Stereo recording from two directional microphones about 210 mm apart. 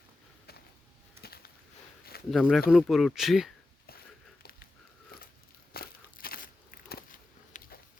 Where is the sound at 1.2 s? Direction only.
50° left (ahead or behind).